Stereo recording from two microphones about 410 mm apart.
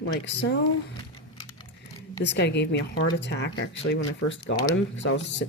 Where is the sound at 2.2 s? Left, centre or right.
Left.